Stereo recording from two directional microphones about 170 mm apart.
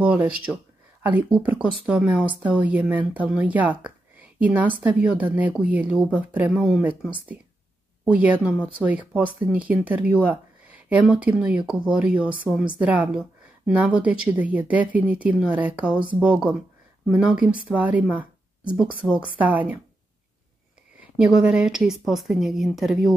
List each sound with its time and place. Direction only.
0.0 s speech: 5° right (ahead or behind)
21.0 s a woman's voice: 5° right (ahead or behind)